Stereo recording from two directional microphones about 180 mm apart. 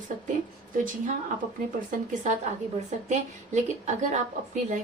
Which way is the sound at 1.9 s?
40° right (ahead or behind).